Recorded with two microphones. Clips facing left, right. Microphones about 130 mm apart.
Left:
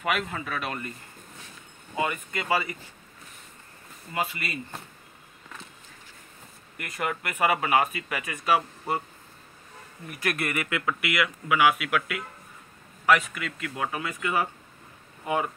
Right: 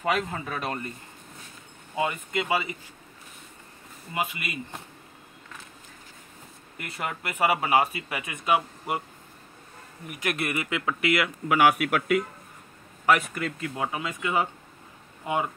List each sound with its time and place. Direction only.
0.0 s speech: 30° right (ahead or behind)
2.0 s speech: 20° right (ahead or behind)
4.1 s speech: 15° right (ahead or behind)
6.8 s speech: 25° right (ahead or behind)
10.0 s speech: 20° right (ahead or behind)
11.4 s a man's voice: 45° right (ahead or behind)
13.5 s speech: 25° right (ahead or behind)